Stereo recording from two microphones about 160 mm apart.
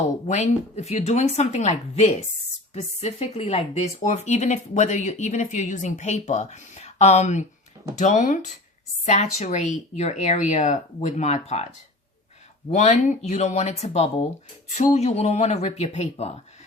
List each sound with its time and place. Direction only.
0.3 s speech: 45° left (ahead or behind)
12.7 s speech: 45° left (ahead or behind)